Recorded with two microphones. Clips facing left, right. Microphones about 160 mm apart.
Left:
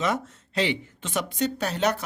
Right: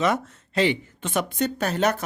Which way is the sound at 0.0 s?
60° right (ahead or behind).